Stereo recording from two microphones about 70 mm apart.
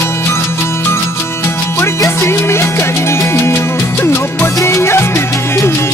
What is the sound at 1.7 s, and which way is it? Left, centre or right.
Music, left.